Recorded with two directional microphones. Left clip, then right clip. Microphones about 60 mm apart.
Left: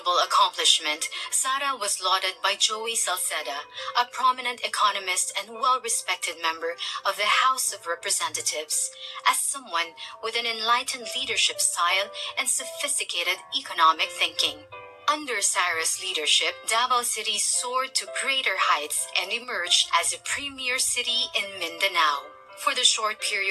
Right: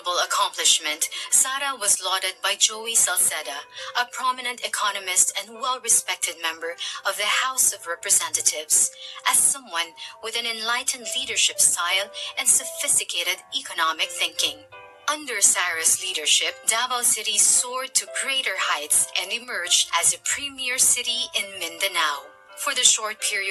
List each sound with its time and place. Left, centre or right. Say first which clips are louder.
0.0 s speech: left 2 dB; right